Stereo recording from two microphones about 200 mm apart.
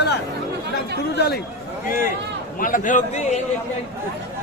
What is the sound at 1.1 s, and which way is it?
Speech, 55° left (ahead or behind).